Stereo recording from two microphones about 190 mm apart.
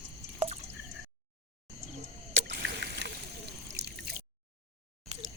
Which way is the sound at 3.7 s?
65° right (ahead or behind).